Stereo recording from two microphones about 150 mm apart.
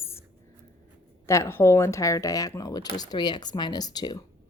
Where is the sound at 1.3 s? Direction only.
20° left (ahead or behind).